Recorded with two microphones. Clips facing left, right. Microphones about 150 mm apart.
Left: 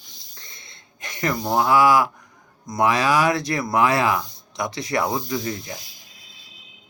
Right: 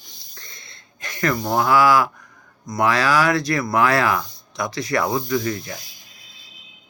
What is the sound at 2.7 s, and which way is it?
Speech, 20° left (ahead or behind).